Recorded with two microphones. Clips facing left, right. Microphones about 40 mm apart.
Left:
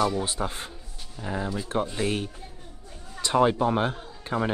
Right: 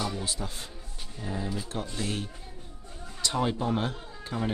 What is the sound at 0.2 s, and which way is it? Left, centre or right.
Speech, left.